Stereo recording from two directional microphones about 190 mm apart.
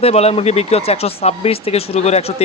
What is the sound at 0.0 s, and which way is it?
Speech, 35° left (ahead or behind).